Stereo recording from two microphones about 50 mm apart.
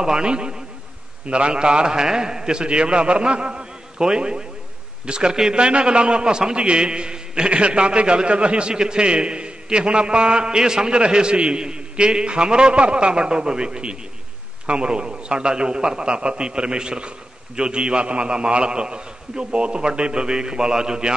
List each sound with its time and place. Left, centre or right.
0.0 s a man's voice: centre